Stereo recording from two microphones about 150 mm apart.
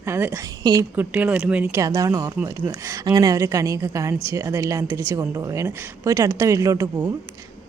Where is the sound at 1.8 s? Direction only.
20° right (ahead or behind).